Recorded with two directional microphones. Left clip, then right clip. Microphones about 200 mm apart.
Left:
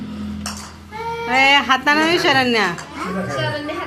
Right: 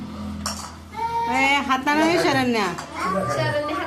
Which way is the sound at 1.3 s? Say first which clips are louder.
Left 8 dB; 10° left (ahead or behind).